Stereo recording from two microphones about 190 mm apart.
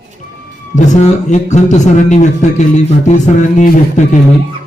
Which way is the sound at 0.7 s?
40° left (ahead or behind).